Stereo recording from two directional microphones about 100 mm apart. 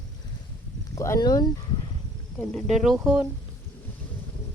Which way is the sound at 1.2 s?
40° left (ahead or behind).